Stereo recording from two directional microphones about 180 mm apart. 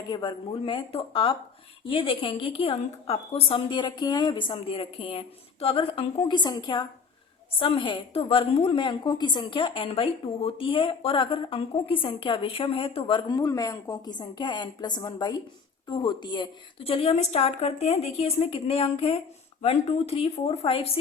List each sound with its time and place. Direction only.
0.1 s a woman's voice: 25° left (ahead or behind)